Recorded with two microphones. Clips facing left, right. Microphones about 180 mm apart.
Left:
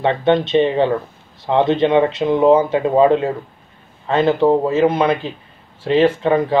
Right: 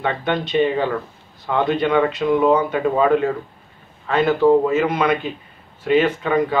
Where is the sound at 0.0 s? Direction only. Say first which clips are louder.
Left 7 dB; 25° left (ahead or behind).